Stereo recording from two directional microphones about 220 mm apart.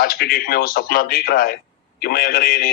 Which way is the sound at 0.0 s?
45° left (ahead or behind).